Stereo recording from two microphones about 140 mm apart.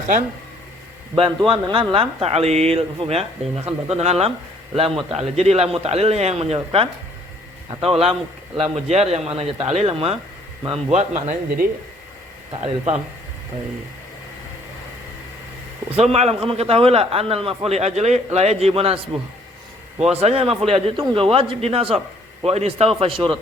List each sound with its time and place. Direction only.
1.1 s a man's voice: 40° right (ahead or behind)
10.7 s a man's voice: 55° right (ahead or behind)
16.0 s a man's voice: 45° right (ahead or behind)
20.0 s a man's voice: 50° right (ahead or behind)